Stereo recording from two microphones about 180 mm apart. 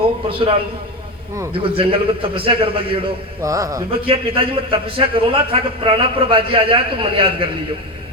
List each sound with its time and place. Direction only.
0.3 s a man's voice: 30° right (ahead or behind)
1.5 s a man's voice: 30° right (ahead or behind)
3.4 s a man's voice: 20° right (ahead or behind)
4.0 s a man's voice: 30° right (ahead or behind)